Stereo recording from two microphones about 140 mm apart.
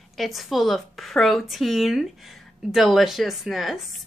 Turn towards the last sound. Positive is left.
turn(degrees=0)  # may be behind; listen again after turning